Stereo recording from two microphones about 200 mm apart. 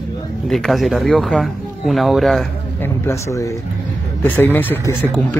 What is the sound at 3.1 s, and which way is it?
Speech, 15° left (ahead or behind).